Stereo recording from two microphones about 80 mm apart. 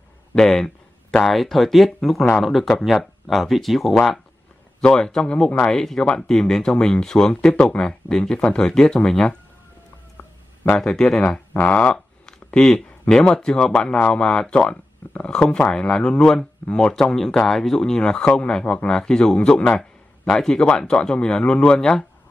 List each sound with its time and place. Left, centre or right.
0.3 s speech: centre
10.1 s a sound: left
10.8 s speech: centre
11.2 s speech: centre